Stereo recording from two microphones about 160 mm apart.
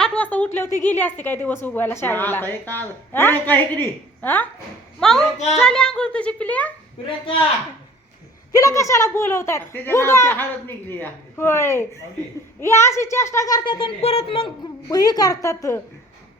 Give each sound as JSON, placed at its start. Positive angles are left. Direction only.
{"t": 0.0, "sound": "a woman's voice", "side_deg": 10}
{"t": 8.5, "sound": "a woman's voice", "side_deg": 20}
{"t": 14.8, "sound": "speech", "side_deg": 25}